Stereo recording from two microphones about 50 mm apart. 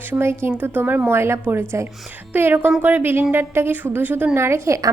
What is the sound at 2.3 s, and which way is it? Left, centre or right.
A woman's voice, right.